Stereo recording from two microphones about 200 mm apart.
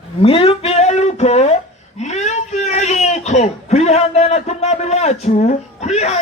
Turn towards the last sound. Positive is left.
turn(degrees=35)  # may be behind; listen again after turning